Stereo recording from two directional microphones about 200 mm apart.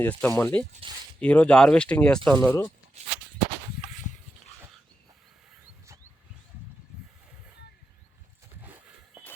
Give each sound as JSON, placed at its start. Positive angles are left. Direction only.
{"t": 0.0, "sound": "speech", "side_deg": 5}
{"t": 0.7, "sound": "speech", "side_deg": -25}
{"t": 1.2, "sound": "speech", "side_deg": 5}
{"t": 3.8, "sound": "a sound", "side_deg": 35}